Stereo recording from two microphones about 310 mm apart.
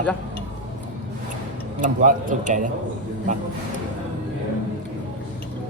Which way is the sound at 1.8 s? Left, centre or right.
Right.